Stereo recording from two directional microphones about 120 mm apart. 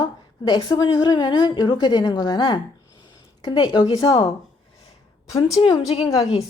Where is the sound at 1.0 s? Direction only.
35° left (ahead or behind).